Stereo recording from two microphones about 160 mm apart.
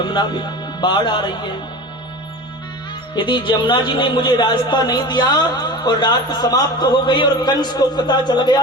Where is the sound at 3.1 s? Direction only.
30° left (ahead or behind).